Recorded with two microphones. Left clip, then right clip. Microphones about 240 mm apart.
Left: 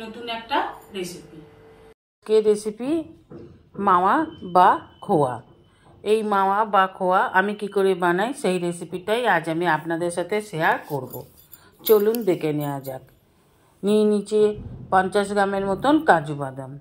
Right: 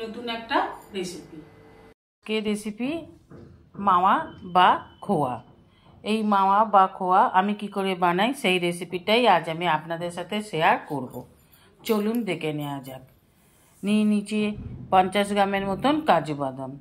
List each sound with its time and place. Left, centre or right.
2.2 s a woman's voice: left
5.0 s a woman's voice: left
11.9 s a woman's voice: left
13.8 s speech: left